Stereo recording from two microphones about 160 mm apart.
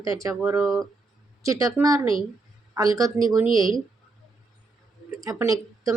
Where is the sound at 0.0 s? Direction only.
20° right (ahead or behind).